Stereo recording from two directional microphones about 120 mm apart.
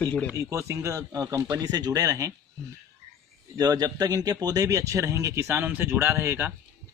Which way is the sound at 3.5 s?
35° right (ahead or behind).